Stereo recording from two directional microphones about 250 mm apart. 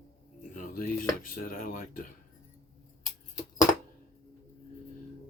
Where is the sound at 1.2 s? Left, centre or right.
Left.